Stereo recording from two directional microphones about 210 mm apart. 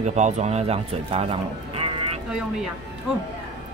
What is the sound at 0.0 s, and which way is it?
Speech, 35° right (ahead or behind).